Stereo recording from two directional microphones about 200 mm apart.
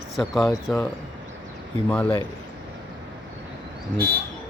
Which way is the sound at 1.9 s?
15° left (ahead or behind).